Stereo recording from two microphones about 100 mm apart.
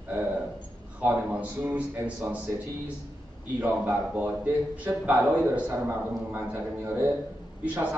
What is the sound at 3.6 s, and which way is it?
A man's voice, 15° right (ahead or behind).